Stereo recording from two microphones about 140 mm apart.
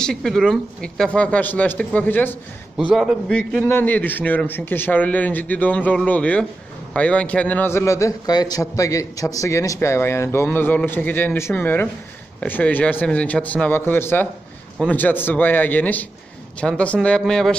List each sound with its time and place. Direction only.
0.0 s a man's voice: 5° left (ahead or behind)
2.9 s a man's voice: centre (ahead or behind)